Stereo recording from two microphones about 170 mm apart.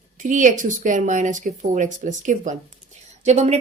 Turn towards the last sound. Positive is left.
turn(degrees=-40)  # may be behind; listen again after turning